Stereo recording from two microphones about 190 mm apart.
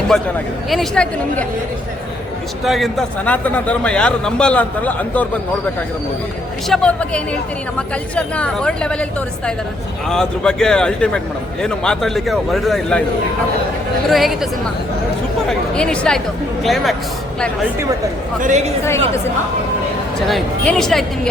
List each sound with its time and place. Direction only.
0.1 s a man's voice: centre (ahead or behind)
2.6 s a man's voice: centre (ahead or behind)
6.7 s a man's voice: 5° left (ahead or behind)
10.1 s a man's voice: 5° left (ahead or behind)
14.1 s a man's voice: centre (ahead or behind)
15.4 s a man's voice: 5° left (ahead or behind)
18.3 s speech: 40° right (ahead or behind)
20.2 s a man's voice: centre (ahead or behind)